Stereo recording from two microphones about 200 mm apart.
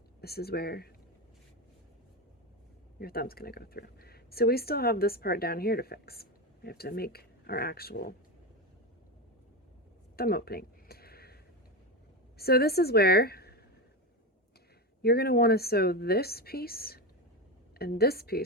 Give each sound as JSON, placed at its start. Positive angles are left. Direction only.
{"t": 0.2, "sound": "a woman's voice", "side_deg": 50}
{"t": 3.0, "sound": "a woman's voice", "side_deg": 50}
{"t": 10.2, "sound": "a sound", "side_deg": 50}
{"t": 12.4, "sound": "a woman's voice", "side_deg": 50}
{"t": 15.0, "sound": "a woman's voice", "side_deg": 50}